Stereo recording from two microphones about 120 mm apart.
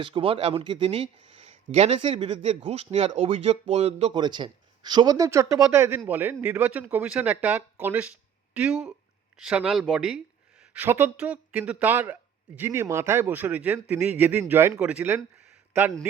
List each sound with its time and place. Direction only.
0.0 s speech: 45° right (ahead or behind)
4.1 s a man's voice: 40° right (ahead or behind); by 15.2 s 15° right (ahead or behind)